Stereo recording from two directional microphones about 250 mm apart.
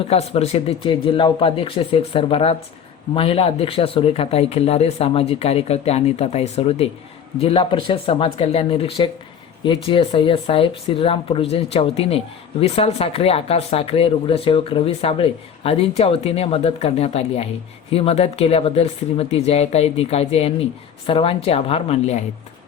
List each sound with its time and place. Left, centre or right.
0.0 s speech: left